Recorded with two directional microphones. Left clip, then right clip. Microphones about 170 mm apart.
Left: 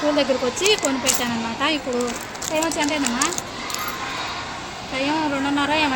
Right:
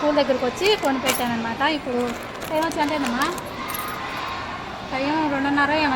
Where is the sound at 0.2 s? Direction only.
Centre (ahead or behind).